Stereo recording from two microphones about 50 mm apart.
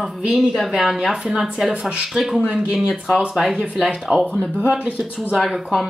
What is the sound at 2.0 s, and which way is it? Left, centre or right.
Speech, centre.